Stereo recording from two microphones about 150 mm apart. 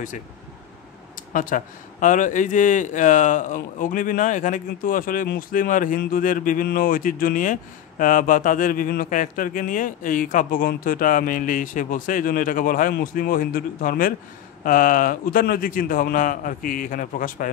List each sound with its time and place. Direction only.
1.3 s a man's voice: 65° left (ahead or behind)